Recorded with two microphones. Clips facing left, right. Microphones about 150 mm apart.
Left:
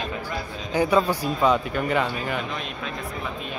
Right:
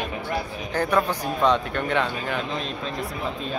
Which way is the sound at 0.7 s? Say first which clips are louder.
Left 2 dB; 10° left (ahead or behind).